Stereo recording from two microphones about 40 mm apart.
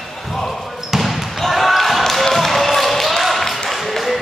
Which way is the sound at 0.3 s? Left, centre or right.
Centre.